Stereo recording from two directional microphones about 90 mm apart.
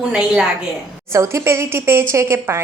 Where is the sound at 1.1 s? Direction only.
30° right (ahead or behind).